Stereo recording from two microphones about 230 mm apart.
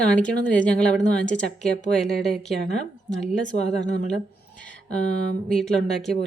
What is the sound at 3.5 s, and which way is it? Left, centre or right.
Speech, left.